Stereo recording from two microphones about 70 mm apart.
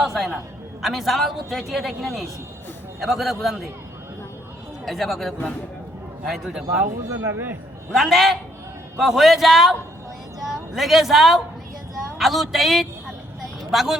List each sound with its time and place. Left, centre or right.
0.0 s a sound: centre
0.8 s a woman's voice: centre
4.9 s a woman's voice: centre
7.3 s a man's voice: right
7.9 s a woman's voice: centre